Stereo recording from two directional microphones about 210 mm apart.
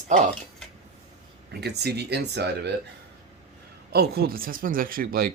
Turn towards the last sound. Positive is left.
turn(degrees=-45)  # may be behind; listen again after turning